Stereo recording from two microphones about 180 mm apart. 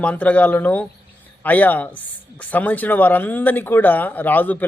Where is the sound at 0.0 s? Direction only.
10° left (ahead or behind).